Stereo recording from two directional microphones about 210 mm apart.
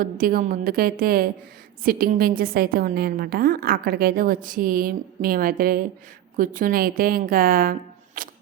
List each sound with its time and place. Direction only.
0.0 s a woman's voice: 45° right (ahead or behind)